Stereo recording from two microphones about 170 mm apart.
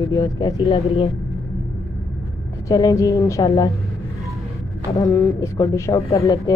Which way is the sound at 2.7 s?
20° left (ahead or behind).